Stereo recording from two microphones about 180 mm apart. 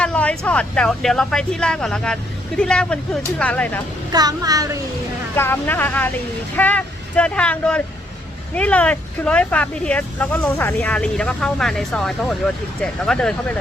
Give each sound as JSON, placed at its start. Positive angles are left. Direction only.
{"t": 0.0, "sound": "speech", "side_deg": 5}
{"t": 4.1, "sound": "speech", "side_deg": -20}
{"t": 5.4, "sound": "speech", "side_deg": 10}